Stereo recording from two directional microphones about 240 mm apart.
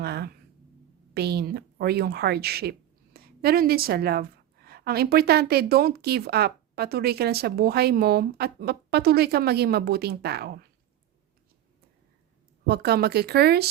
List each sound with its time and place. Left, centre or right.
0.0 s a sound: right
1.1 s a woman's voice: right
12.6 s a woman's voice: right